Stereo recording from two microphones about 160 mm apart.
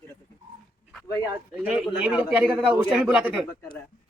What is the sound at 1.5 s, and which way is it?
A man's voice, 5° right (ahead or behind).